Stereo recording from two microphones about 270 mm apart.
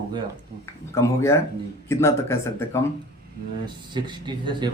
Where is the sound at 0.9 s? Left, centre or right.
Centre.